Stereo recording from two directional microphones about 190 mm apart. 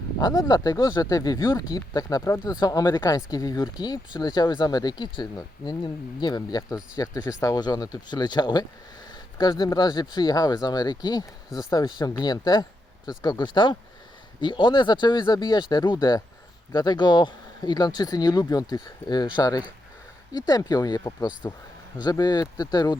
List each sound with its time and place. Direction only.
0.2 s speech: 20° left (ahead or behind)